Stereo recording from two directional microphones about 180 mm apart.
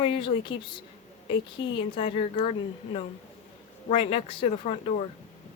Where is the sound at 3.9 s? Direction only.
30° left (ahead or behind).